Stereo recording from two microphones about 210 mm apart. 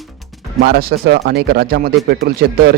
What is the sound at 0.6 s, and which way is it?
Speech, 50° right (ahead or behind).